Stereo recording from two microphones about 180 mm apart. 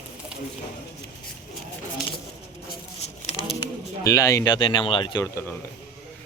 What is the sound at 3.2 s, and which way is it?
Bird, 35° left (ahead or behind).